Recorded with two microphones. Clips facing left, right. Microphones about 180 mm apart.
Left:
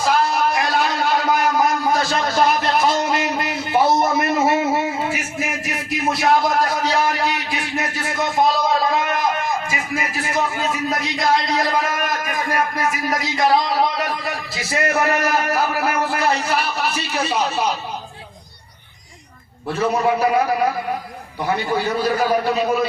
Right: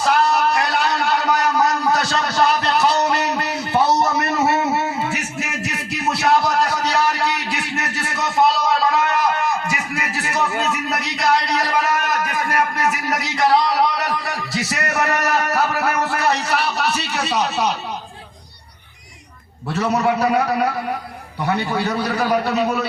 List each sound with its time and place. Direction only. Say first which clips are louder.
0.0 s a sound: right 1 dB; 70° right (ahead or behind)
5.1 s music: left 1 dB; 70° right (ahead or behind)
19.7 s a man's voice: even; 75° right (ahead or behind)
21.4 s a man's voice: even; 70° right (ahead or behind)